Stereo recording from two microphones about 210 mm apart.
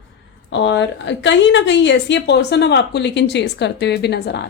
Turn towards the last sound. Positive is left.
turn(degrees=55)  # may be behind; listen again after turning